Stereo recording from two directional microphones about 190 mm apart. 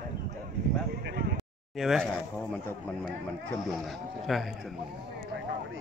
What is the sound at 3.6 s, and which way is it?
Speech, centre (ahead or behind).